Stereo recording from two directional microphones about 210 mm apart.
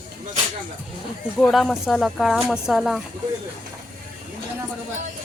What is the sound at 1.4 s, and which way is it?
Speech, centre (ahead or behind).